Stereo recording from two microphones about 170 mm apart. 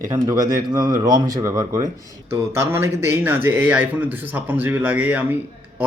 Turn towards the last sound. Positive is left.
turn(degrees=-10)  # may be behind; listen again after turning